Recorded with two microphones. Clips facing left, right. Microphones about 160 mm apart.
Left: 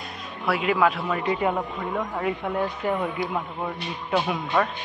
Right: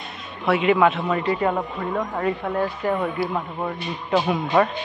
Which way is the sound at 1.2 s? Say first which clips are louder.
Right 1 dB; 15° left (ahead or behind).